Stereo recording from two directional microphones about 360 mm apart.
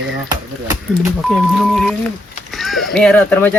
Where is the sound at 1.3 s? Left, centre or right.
Centre.